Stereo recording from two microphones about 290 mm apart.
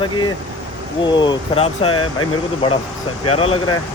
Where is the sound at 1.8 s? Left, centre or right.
Left.